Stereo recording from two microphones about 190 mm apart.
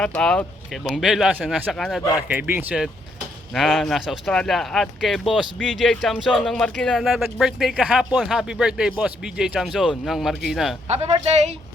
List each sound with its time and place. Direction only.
0.0 s speech: 5° left (ahead or behind)
2.2 s speech: 10° right (ahead or behind)
10.8 s speech: 35° right (ahead or behind)